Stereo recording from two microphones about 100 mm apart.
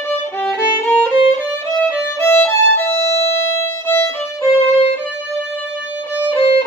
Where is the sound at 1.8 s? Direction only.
25° left (ahead or behind).